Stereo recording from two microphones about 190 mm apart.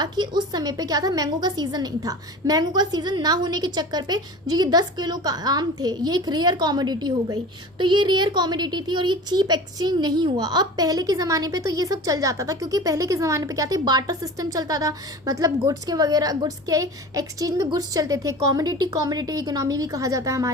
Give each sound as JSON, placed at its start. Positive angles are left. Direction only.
{"t": 0.0, "sound": "a child's voice", "side_deg": -20}